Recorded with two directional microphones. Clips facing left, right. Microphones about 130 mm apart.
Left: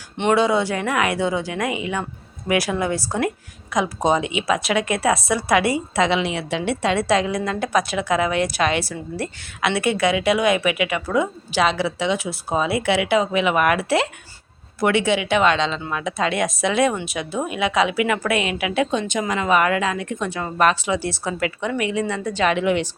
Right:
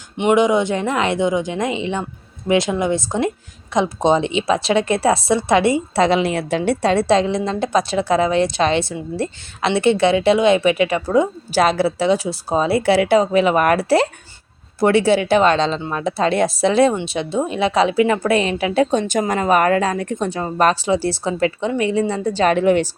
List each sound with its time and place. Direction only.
0.2 s a woman's voice: 15° right (ahead or behind)
6.0 s a woman's voice: 40° right (ahead or behind)